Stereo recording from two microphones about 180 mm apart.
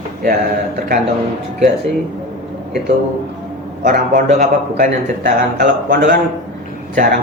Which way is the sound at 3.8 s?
50° right (ahead or behind).